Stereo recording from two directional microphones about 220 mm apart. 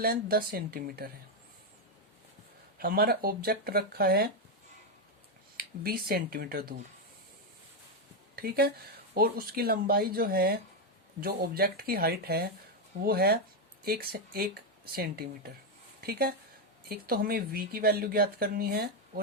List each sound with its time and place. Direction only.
0.0 s speech: 45° right (ahead or behind)
2.7 s speech: 45° right (ahead or behind)
5.5 s speech: 45° right (ahead or behind)
8.4 s speech: 45° right (ahead or behind)